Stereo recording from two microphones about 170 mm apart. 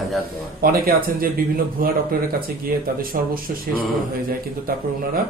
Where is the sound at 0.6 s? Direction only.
60° right (ahead or behind).